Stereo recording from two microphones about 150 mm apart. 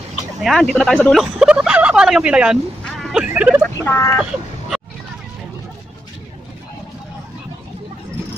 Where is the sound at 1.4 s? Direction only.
5° right (ahead or behind).